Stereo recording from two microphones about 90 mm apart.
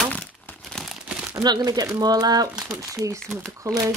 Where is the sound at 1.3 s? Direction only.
50° right (ahead or behind).